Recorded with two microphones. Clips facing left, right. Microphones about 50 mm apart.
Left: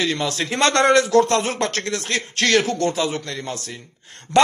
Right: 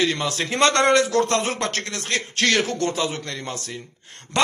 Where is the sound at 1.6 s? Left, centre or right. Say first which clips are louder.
Left 3 dB; centre.